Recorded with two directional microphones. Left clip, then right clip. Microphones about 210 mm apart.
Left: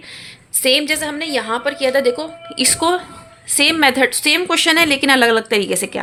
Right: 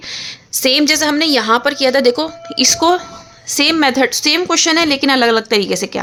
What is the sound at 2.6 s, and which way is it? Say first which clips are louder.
A woman's voice: right 4 dB; 25° right (ahead or behind).